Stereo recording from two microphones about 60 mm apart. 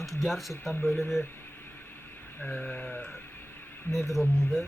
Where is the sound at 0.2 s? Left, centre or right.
Centre.